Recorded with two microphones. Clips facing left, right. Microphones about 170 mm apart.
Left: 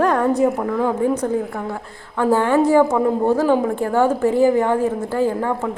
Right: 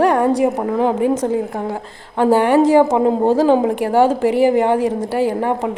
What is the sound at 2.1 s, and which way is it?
A woman's voice, 15° right (ahead or behind).